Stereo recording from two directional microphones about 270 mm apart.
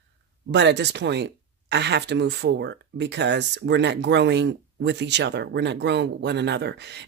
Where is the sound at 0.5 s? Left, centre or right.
Right.